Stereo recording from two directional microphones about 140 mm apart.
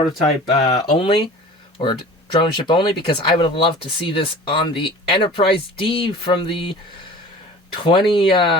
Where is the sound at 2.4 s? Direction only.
35° left (ahead or behind).